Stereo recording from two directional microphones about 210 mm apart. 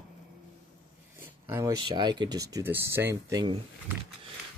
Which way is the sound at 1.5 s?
15° right (ahead or behind).